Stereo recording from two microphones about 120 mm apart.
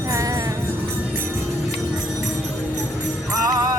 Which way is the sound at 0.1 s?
30° right (ahead or behind).